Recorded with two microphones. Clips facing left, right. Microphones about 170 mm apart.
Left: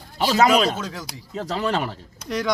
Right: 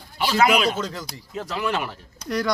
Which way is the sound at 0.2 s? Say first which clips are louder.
Left 2 dB; 40° left (ahead or behind).